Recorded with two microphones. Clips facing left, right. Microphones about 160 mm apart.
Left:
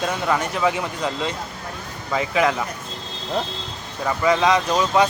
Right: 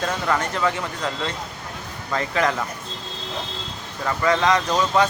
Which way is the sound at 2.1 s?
10° left (ahead or behind).